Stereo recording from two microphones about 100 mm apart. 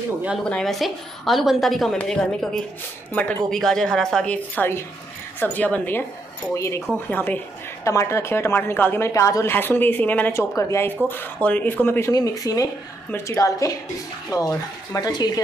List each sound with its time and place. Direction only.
0.4 s a woman's voice: 5° left (ahead or behind)
6.5 s a woman's voice: 30° left (ahead or behind)
7.1 s a woman's voice: 20° left (ahead or behind)
7.8 s a woman's voice: 30° left (ahead or behind)
9.1 s speech: 30° left (ahead or behind)
9.5 s a woman's voice: 20° left (ahead or behind)
10.3 s a woman's voice: 30° left (ahead or behind)
11.4 s a woman's voice: 15° left (ahead or behind)
12.1 s speech: 35° left (ahead or behind)